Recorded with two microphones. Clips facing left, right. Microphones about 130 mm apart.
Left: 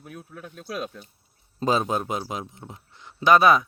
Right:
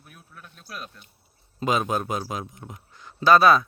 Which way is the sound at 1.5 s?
30° left (ahead or behind).